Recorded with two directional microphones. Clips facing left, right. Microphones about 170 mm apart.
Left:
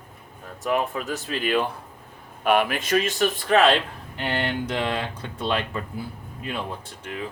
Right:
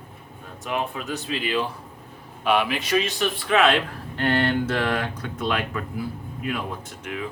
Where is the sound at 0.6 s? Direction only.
45° left (ahead or behind).